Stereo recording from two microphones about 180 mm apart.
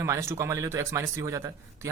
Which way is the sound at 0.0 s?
15° right (ahead or behind).